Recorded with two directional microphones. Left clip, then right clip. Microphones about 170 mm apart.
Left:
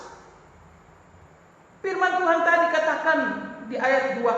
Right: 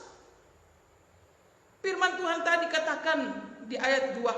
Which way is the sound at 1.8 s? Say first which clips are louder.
Left 6 dB; 55° right (ahead or behind).